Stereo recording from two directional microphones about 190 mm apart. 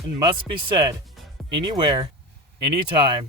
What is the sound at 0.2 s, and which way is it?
Speech, 25° right (ahead or behind).